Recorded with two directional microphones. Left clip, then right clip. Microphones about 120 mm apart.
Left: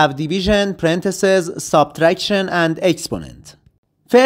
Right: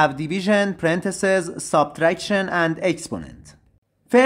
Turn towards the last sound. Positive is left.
turn(degrees=35)  # may be behind; listen again after turning